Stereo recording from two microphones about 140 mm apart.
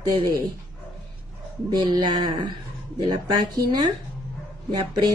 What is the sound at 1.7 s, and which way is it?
Speech, 30° right (ahead or behind).